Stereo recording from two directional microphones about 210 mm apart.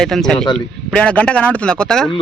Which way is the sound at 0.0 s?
Centre (ahead or behind).